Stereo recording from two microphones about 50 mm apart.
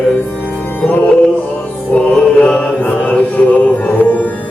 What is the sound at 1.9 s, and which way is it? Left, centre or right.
Mantra, left.